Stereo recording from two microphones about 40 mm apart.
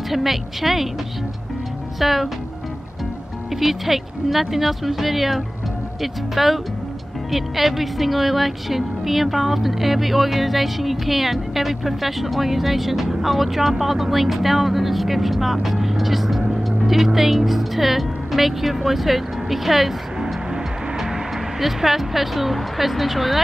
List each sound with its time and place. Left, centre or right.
0.1 s speech: centre
2.0 s speech: centre
3.5 s speech: centre
21.0 s speech: centre